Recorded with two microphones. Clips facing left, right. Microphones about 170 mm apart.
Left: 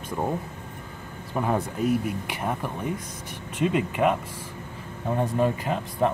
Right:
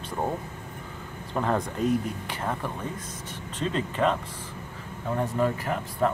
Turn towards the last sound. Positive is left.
turn(degrees=20)  # may be behind; listen again after turning